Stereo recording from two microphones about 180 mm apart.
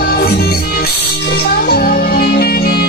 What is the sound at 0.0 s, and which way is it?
Music, 60° left (ahead or behind).